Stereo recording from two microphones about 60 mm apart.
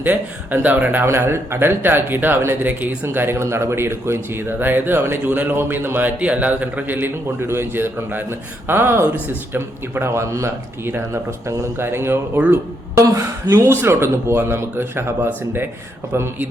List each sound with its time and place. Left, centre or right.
0.0 s speech: right
1.0 s speech: right
5.2 s speech: right
6.1 s speech: right
13.0 s speech: right